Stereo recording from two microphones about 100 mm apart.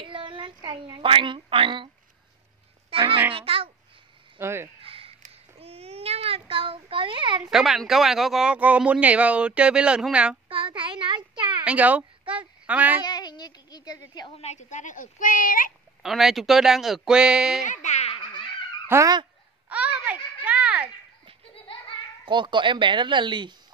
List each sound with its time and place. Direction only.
0.0 s speech: 55° right (ahead or behind)
2.9 s a sound: 65° right (ahead or behind)
3.3 s a child's voice: 65° right (ahead or behind)
4.4 s speech: 25° right (ahead or behind)
4.8 s child singing: 70° right (ahead or behind)
7.5 s speech: centre (ahead or behind)
10.5 s a sound: 55° right (ahead or behind)
11.6 s a sound: 15° right (ahead or behind)
13.0 s speech: 45° left (ahead or behind)
16.0 s speech: 5° right (ahead or behind)
17.9 s baby laughter: 75° left (ahead or behind)
18.9 s speech: 25° right (ahead or behind)
19.7 s a sound: 15° right (ahead or behind)
22.2 s speech: 55° right (ahead or behind)